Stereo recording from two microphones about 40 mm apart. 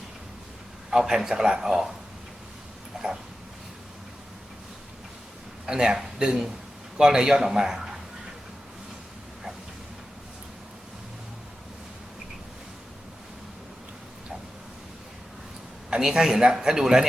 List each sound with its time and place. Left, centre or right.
0.9 s a man's voice: centre
2.9 s a sound: centre
5.6 s a man's voice: centre
16.0 s a man's voice: centre